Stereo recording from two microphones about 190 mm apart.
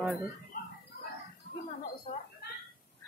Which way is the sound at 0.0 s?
5° right (ahead or behind).